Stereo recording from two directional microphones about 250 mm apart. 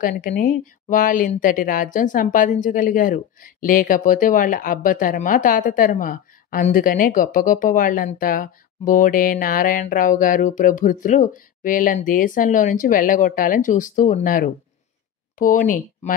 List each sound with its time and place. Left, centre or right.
0.0 s a woman's voice: left